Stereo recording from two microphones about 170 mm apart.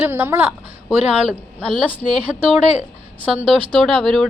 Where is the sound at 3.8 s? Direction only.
Centre (ahead or behind).